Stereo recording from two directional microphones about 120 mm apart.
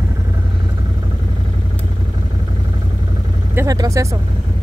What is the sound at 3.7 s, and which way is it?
Speech, 30° right (ahead or behind).